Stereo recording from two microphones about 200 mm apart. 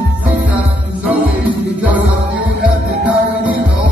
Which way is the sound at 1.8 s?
5° right (ahead or behind).